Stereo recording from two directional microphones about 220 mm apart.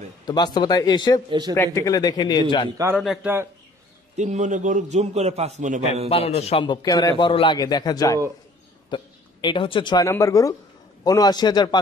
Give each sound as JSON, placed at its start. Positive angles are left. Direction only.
{"t": 0.2, "sound": "a man's voice", "side_deg": 20}
{"t": 3.0, "sound": "a man's voice", "side_deg": -5}
{"t": 4.2, "sound": "a man's voice", "side_deg": -35}
{"t": 6.0, "sound": "a man's voice", "side_deg": 25}